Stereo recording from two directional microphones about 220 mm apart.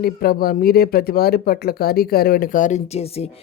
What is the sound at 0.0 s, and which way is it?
Speech, 45° left (ahead or behind).